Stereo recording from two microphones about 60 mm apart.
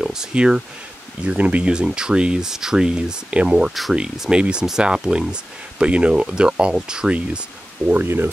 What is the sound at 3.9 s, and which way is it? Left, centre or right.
Speech, centre.